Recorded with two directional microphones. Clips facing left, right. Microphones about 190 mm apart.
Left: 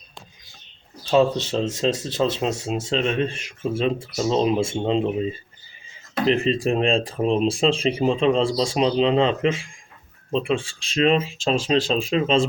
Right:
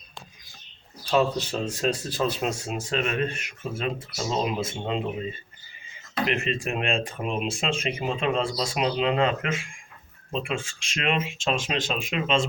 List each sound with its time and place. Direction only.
1.0 s speech: 25° left (ahead or behind)